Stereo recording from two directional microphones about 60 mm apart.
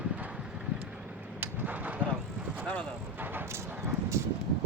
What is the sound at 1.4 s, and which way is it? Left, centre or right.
Vehicle, right.